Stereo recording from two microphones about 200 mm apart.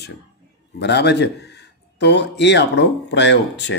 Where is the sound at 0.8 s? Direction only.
60° left (ahead or behind).